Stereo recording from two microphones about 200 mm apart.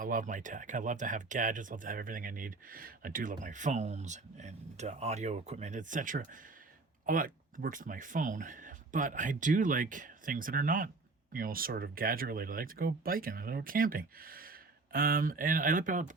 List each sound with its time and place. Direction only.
0.0 s speech: 40° right (ahead or behind)